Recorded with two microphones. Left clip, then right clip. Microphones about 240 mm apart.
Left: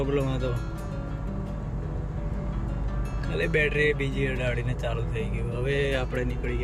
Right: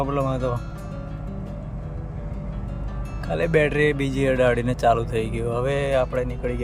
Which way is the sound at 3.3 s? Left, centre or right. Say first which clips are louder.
Right 5 dB; centre.